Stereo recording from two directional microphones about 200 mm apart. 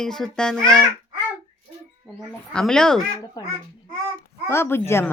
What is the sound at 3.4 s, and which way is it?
A child's voice, 20° left (ahead or behind).